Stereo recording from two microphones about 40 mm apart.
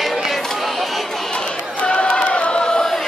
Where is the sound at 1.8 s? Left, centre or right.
Left.